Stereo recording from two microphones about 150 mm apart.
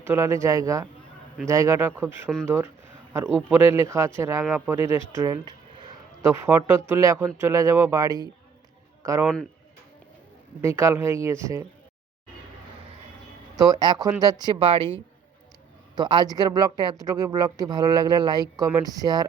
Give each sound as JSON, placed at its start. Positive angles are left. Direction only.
{"t": 0.0, "sound": "speech", "side_deg": -20}
{"t": 10.6, "sound": "speech", "side_deg": -20}
{"t": 13.6, "sound": "a woman's voice", "side_deg": -25}
{"t": 16.0, "sound": "speech", "side_deg": -30}